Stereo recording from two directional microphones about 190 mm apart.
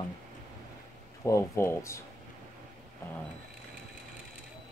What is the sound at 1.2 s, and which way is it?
Speech, 15° left (ahead or behind).